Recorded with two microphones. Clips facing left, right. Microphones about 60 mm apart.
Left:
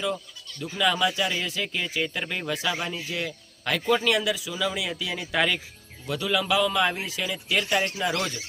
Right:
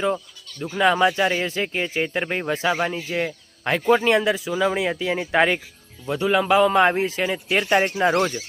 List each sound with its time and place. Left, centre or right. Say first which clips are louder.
0.6 s speech: right 6 dB; right